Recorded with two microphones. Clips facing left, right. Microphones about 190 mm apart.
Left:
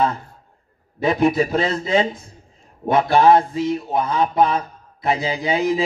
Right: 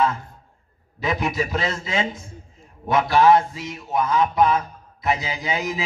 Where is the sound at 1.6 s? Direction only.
35° left (ahead or behind).